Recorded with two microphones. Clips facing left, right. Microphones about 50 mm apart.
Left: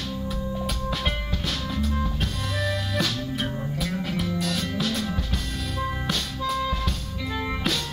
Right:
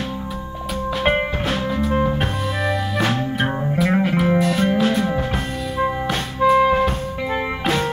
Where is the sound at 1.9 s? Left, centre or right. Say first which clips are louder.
Right 9 dB; right.